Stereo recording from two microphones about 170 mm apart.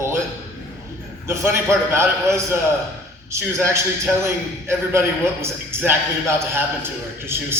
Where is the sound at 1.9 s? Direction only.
15° right (ahead or behind).